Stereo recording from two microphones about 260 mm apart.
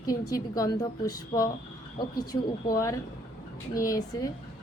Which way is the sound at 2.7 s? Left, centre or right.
Centre.